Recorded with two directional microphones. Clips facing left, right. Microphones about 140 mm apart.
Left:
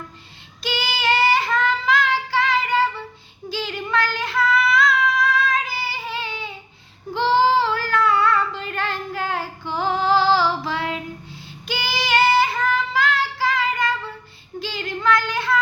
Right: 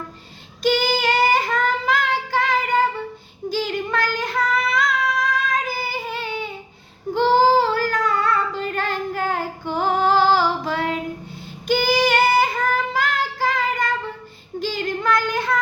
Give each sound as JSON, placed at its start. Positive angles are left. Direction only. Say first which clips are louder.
{"t": 0.6, "sound": "child singing", "louder": "right 6 dB", "side_deg": -45}
{"t": 3.5, "sound": "female singing", "louder": "right 1 dB", "side_deg": -45}
{"t": 5.6, "sound": "child singing", "louder": "right 2 dB", "side_deg": -45}
{"t": 14.6, "sound": "female singing", "louder": "right 2 dB", "side_deg": -45}